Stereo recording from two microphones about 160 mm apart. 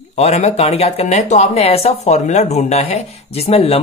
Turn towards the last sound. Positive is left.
turn(degrees=35)  # may be behind; listen again after turning